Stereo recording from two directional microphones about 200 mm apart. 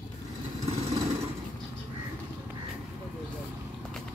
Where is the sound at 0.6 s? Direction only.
30° right (ahead or behind).